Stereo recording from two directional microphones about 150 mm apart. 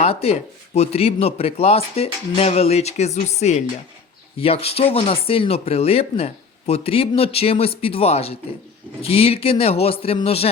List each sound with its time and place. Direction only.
0.0 s speech: 40° left (ahead or behind)